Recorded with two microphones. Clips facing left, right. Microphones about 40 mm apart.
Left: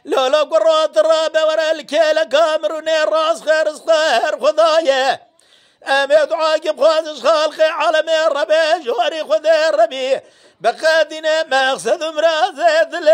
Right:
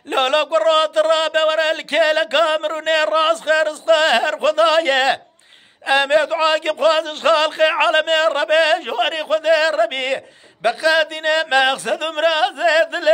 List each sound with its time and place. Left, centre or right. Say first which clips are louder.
0.1 s a man's voice: left 3 dB; right